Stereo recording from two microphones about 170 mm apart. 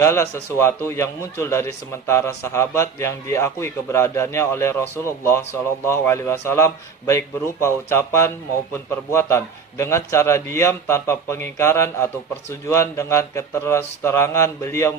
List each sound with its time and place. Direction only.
0.0 s a man's voice: 15° left (ahead or behind)